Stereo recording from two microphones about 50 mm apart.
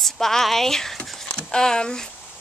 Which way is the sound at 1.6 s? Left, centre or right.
Centre.